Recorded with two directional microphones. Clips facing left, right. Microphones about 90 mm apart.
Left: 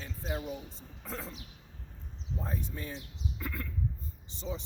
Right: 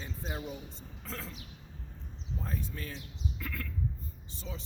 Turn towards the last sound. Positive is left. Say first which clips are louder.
# left 5 dB
turn(degrees=20)  # may be behind; listen again after turning